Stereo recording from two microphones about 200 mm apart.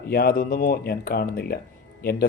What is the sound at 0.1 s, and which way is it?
Speech, 50° left (ahead or behind).